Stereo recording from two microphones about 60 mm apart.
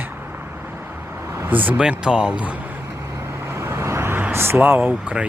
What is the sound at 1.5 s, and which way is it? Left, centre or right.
Speech, right.